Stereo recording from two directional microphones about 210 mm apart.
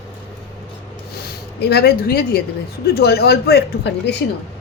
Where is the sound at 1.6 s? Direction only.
50° left (ahead or behind).